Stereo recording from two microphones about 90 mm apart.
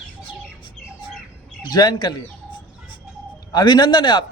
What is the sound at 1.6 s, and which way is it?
Speech, 50° left (ahead or behind).